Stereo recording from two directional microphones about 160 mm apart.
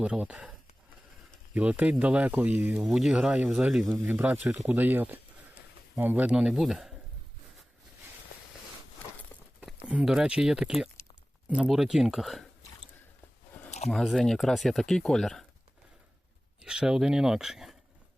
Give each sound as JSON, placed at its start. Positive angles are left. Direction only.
{"t": 0.0, "sound": "speech", "side_deg": -5}
{"t": 1.5, "sound": "speech", "side_deg": -10}
{"t": 9.9, "sound": "speech", "side_deg": -5}
{"t": 13.7, "sound": "a sound", "side_deg": 45}
{"t": 13.9, "sound": "speech", "side_deg": 0}
{"t": 16.6, "sound": "speech", "side_deg": -5}